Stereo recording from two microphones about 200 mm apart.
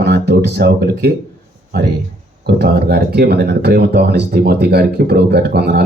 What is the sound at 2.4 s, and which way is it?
Speech, 55° right (ahead or behind).